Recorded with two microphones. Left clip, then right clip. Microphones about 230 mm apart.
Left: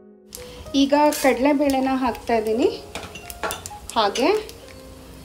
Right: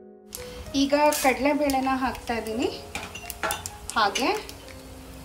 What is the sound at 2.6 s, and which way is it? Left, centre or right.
Speech, left.